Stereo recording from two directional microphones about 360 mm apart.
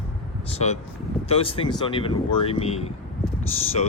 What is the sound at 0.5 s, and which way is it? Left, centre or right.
Speech, centre.